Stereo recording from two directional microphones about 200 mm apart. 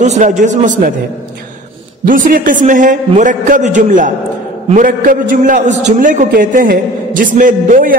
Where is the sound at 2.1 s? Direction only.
45° right (ahead or behind).